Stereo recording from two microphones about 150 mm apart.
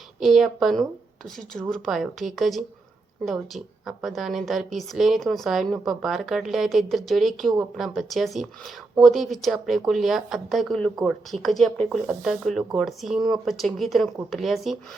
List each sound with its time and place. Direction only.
0.2 s speech: centre (ahead or behind)